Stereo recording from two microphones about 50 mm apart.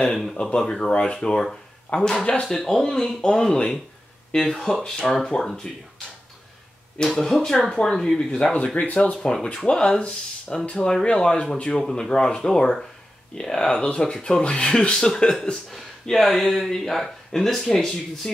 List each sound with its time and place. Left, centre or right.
0.0 s speech: centre
1.9 s speech: left
2.4 s speech: centre
7.1 s speech: centre
8.7 s speech: left
15.7 s speech: centre